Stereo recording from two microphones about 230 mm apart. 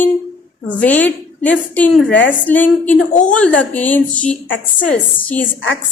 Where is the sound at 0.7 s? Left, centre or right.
Centre.